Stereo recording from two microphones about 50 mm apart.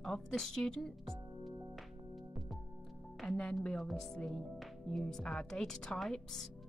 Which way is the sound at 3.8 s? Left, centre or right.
Centre.